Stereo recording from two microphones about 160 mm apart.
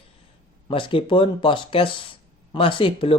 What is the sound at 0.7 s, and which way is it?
Speech, 35° left (ahead or behind).